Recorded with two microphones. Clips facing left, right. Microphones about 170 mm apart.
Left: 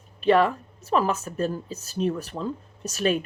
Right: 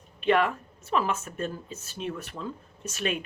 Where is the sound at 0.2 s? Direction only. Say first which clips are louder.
Left 4 dB; 35° left (ahead or behind).